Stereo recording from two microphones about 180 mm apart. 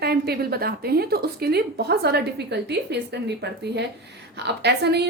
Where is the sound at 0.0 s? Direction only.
60° right (ahead or behind).